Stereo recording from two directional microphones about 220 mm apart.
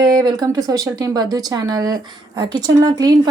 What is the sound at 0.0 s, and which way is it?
Speech, 20° right (ahead or behind).